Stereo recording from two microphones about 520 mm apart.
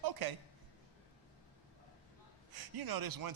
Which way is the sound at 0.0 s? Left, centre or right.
Right.